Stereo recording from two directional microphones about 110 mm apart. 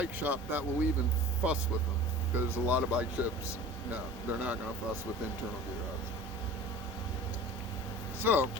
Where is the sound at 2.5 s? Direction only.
15° right (ahead or behind).